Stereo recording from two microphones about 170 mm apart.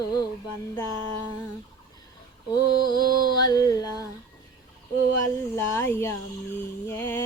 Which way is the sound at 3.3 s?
25° left (ahead or behind).